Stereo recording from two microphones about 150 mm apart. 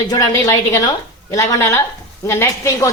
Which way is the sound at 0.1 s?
25° left (ahead or behind).